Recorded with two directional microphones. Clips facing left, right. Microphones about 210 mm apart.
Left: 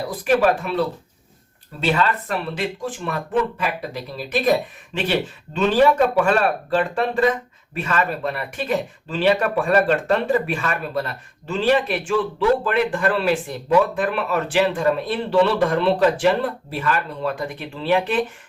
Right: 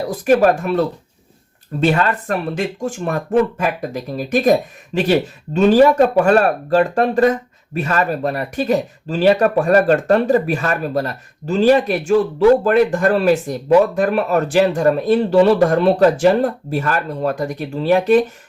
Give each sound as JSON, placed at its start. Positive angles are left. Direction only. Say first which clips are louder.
{"t": 0.0, "sound": "speech", "louder": "right 5 dB", "side_deg": -45}